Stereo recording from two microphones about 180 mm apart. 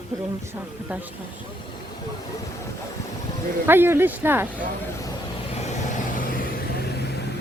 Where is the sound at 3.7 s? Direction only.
10° right (ahead or behind).